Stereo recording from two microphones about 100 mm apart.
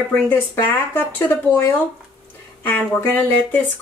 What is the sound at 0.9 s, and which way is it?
Speech, 20° left (ahead or behind).